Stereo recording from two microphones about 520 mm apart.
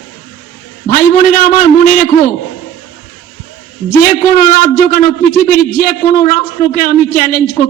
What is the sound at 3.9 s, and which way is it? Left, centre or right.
A man's voice, centre.